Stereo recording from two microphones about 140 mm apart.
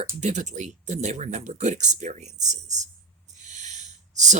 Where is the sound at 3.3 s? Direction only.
60° right (ahead or behind).